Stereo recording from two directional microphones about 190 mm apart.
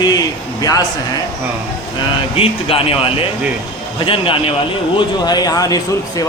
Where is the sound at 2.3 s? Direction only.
30° left (ahead or behind).